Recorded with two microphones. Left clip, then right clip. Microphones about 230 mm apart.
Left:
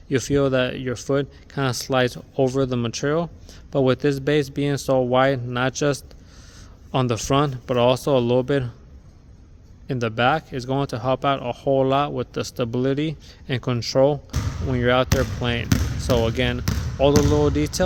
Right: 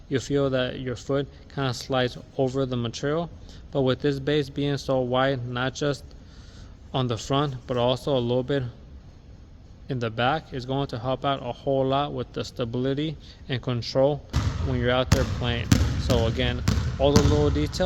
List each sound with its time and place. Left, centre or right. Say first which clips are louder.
0.1 s speech: left 4 dB; left
9.8 s speech: left 5 dB; left